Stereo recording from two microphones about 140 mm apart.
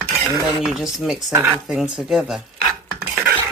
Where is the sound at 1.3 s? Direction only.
20° right (ahead or behind).